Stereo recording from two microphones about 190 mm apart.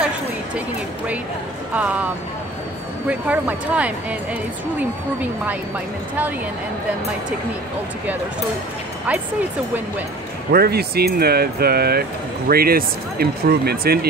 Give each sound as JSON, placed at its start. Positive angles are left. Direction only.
{"t": 1.7, "sound": "speech", "side_deg": -10}
{"t": 3.1, "sound": "speech", "side_deg": -5}
{"t": 10.5, "sound": "speech", "side_deg": -55}